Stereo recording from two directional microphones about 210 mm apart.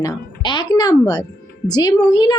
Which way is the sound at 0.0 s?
20° left (ahead or behind).